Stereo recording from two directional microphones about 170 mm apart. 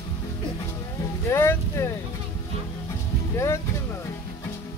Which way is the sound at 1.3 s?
15° left (ahead or behind).